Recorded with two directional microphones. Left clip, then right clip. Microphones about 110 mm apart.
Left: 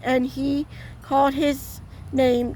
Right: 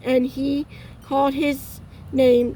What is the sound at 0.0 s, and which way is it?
Speech, 50° left (ahead or behind).